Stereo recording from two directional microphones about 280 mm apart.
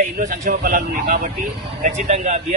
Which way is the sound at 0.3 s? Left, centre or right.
Right.